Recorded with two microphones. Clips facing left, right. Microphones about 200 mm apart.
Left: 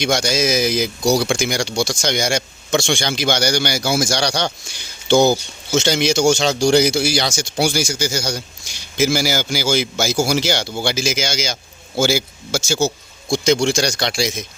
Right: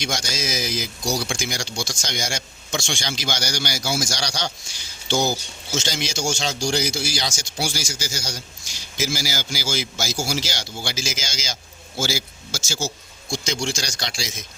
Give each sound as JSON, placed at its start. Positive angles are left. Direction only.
{"t": 0.0, "sound": "speech", "side_deg": 65}